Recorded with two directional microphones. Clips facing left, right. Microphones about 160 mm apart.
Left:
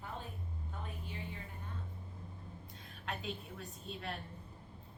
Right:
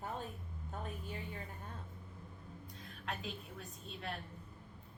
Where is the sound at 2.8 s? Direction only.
Centre (ahead or behind).